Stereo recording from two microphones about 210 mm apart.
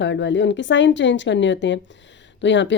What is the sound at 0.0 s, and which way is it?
A woman's voice, 60° left (ahead or behind).